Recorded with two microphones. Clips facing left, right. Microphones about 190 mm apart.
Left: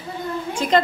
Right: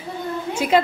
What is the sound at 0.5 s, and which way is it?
Speech, 10° right (ahead or behind).